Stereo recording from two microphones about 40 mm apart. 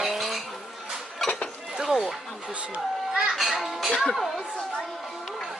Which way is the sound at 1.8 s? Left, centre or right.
Centre.